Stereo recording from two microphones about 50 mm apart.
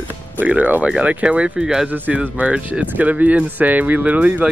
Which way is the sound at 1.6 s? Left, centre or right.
Centre.